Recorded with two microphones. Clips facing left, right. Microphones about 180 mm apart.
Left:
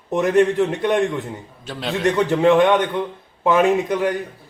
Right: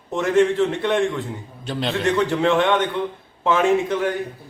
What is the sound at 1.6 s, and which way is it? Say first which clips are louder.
Speech: right 2 dB; centre (ahead or behind).